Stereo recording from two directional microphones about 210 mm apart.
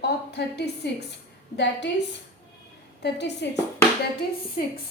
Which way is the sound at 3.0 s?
55° left (ahead or behind).